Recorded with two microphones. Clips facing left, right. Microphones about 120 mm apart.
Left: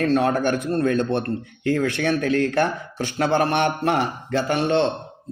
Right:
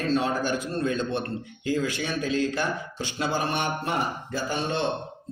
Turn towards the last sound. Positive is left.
turn(degrees=70)  # may be behind; listen again after turning